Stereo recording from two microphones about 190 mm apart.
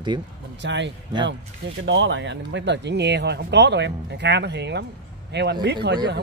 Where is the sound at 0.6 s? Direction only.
70° right (ahead or behind).